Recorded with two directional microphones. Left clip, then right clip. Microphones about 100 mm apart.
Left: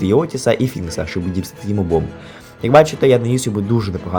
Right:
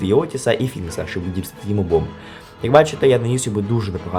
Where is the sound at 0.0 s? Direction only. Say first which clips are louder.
Left 2 dB; 25° left (ahead or behind).